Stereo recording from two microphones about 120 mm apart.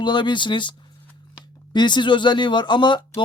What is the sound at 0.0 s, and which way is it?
Speech, 40° left (ahead or behind).